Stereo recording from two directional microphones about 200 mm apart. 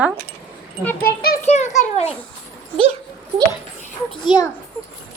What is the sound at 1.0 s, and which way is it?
Speech, 50° left (ahead or behind).